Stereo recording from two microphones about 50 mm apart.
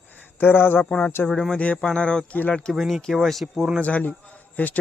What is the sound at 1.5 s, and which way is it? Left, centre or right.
Speech, left.